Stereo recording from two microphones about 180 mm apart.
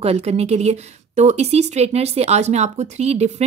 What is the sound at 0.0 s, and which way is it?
A woman's voice, 35° right (ahead or behind).